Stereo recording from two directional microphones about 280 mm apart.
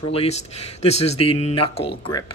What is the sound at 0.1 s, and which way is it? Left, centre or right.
Speech, left.